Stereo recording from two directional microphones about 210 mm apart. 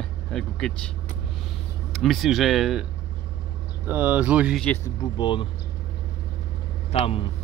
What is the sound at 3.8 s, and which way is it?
Speech, 10° right (ahead or behind).